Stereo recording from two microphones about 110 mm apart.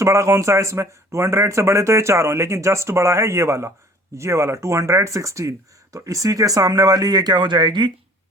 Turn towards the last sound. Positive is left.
turn(degrees=-45)  # may be behind; listen again after turning